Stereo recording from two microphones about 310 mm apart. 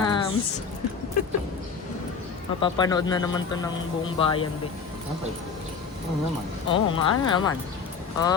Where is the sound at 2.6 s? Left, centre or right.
Centre.